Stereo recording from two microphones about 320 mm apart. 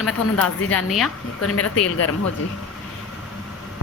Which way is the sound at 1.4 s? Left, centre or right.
Left.